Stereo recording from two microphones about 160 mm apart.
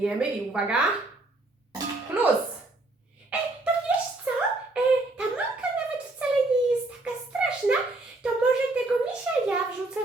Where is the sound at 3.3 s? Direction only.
10° right (ahead or behind).